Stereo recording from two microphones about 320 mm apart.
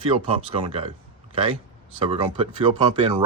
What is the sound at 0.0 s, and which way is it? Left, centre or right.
Speech, centre.